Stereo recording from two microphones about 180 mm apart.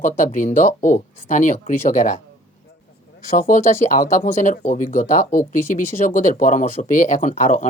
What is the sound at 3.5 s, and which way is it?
Speech, 45° left (ahead or behind).